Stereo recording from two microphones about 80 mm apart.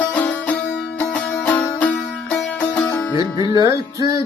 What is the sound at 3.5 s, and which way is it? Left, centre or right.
Music, right.